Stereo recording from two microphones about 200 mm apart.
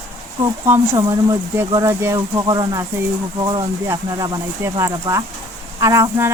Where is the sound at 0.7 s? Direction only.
15° right (ahead or behind).